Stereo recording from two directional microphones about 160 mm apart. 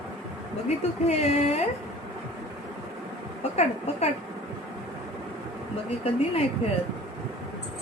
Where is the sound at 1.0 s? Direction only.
45° left (ahead or behind).